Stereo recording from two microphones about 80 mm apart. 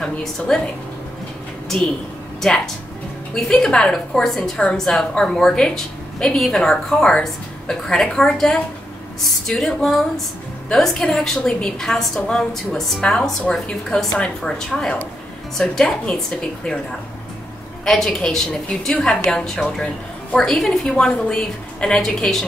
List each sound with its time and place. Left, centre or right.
0.0 s a woman's voice: centre
2.4 s a woman's voice: centre
17.8 s a woman's voice: centre